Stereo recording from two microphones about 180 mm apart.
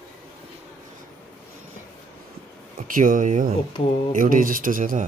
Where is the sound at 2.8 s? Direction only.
50° right (ahead or behind).